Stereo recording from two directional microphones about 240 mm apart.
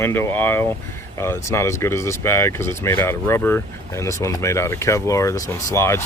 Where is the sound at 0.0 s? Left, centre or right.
Centre.